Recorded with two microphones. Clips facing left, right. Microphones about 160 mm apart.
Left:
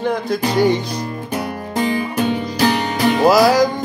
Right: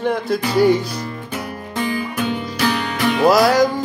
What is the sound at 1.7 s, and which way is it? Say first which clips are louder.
Music: left 3 dB; 35° left (ahead or behind).